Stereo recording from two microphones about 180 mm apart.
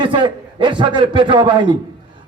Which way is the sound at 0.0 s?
25° right (ahead or behind).